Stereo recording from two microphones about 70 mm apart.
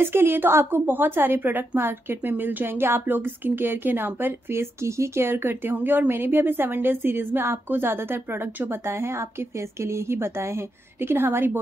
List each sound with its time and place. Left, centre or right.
0.0 s speech: right